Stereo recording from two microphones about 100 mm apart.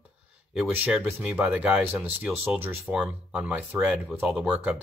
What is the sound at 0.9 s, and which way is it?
Speech, 5° right (ahead or behind).